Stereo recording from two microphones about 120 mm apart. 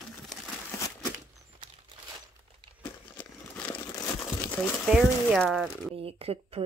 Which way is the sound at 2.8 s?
10° left (ahead or behind).